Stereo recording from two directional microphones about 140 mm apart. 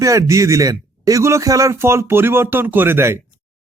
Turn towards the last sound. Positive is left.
turn(degrees=-15)  # may be behind; listen again after turning